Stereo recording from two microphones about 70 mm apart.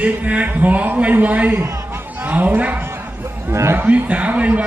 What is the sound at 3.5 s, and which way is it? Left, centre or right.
Speech, right.